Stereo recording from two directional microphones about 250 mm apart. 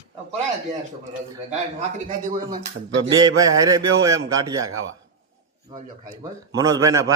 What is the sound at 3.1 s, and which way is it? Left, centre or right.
A man's voice, centre.